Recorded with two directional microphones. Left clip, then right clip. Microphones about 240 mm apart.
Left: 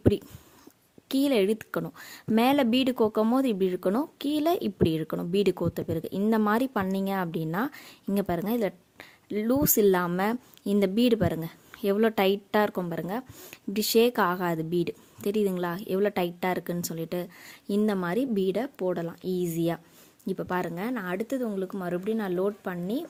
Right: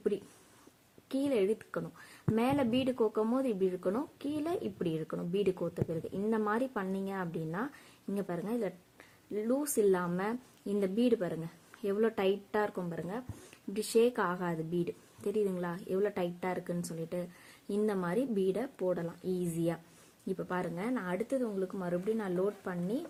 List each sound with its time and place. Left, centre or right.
1.0 s speech: left